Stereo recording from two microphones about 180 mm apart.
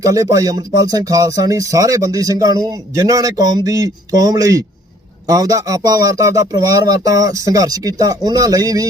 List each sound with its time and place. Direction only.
0.0 s speech: 20° right (ahead or behind)